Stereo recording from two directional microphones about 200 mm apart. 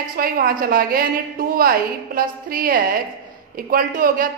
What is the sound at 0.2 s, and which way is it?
A woman's voice, 45° right (ahead or behind).